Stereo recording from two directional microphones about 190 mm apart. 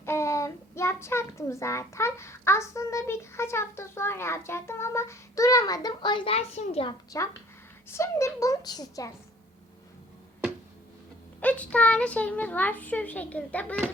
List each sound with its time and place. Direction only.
0.0 s a child's voice: 15° left (ahead or behind); by 6.9 s 30° left (ahead or behind)
7.1 s a child's voice: 20° left (ahead or behind)
11.3 s a child's voice: 5° left (ahead or behind)